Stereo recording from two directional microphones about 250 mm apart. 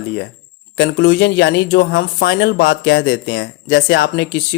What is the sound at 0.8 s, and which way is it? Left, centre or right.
Speech, left.